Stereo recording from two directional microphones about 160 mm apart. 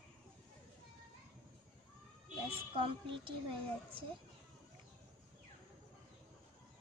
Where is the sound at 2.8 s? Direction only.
35° right (ahead or behind).